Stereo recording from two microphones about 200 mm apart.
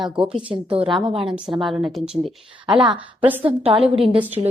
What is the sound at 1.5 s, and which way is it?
Speech, centre (ahead or behind).